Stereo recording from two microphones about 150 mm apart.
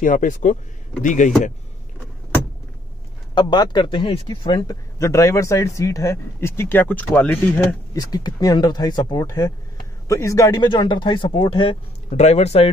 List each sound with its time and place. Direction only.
0.0 s speech: 60° left (ahead or behind)
3.3 s a man's voice: 30° left (ahead or behind); by 7.6 s 10° left (ahead or behind)
7.9 s a man's voice: 25° left (ahead or behind)
12.1 s speech: 45° left (ahead or behind)